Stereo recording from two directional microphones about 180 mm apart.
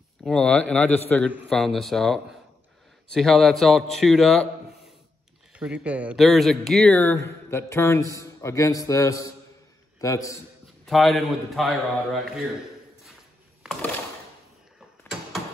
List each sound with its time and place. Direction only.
0.2 s a man's voice: 5° left (ahead or behind)
10.9 s a man's voice: centre (ahead or behind)